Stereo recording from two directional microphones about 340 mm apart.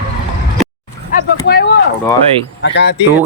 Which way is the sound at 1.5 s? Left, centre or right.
Left.